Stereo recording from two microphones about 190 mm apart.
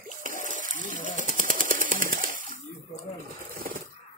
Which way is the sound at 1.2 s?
45° right (ahead or behind).